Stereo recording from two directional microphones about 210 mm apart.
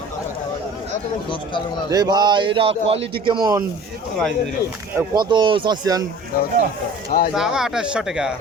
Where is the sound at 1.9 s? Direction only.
20° right (ahead or behind).